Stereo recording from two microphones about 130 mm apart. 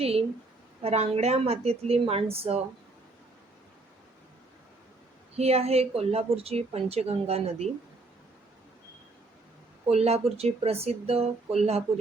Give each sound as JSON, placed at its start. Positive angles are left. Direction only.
{"t": 0.0, "sound": "speech", "side_deg": -50}
{"t": 5.4, "sound": "speech", "side_deg": -55}
{"t": 9.8, "sound": "speech", "side_deg": -55}